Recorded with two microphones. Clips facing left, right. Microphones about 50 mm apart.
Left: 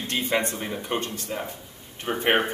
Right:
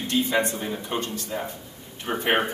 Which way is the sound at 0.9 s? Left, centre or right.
Left.